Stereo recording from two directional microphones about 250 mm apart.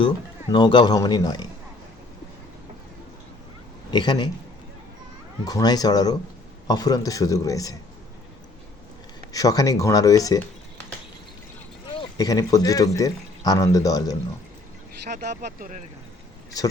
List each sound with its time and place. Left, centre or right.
0.5 s speech: centre
3.9 s speech: centre
5.5 s speech: centre
9.3 s speech: centre
11.9 s speech: centre
15.1 s speech: right